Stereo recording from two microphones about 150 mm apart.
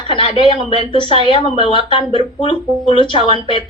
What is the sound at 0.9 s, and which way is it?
Speech, 35° left (ahead or behind).